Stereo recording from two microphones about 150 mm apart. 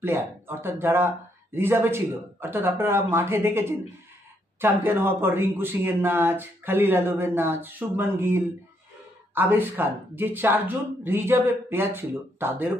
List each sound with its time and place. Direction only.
0.0 s a man's voice: 15° right (ahead or behind)